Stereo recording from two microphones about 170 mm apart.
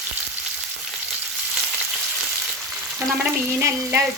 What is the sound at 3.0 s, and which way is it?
A woman's voice, 10° right (ahead or behind).